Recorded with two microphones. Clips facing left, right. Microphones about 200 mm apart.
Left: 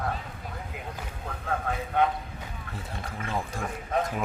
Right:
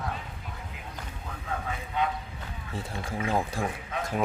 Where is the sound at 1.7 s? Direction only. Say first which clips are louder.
Left 5 dB; 55° left (ahead or behind).